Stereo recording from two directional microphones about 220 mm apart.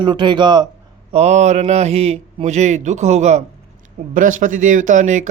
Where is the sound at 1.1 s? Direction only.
30° right (ahead or behind).